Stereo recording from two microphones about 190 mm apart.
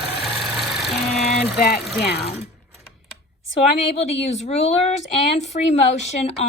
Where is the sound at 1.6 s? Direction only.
55° left (ahead or behind).